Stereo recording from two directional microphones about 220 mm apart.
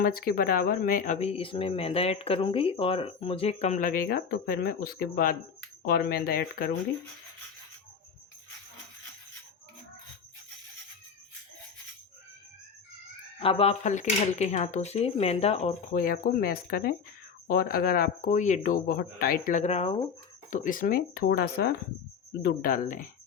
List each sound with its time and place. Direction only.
0.0 s speech: 45° left (ahead or behind)
13.4 s speech: 25° left (ahead or behind)